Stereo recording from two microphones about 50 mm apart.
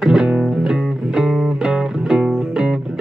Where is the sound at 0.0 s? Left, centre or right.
Centre.